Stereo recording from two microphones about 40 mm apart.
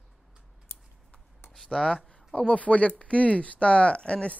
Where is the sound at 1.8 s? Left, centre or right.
Left.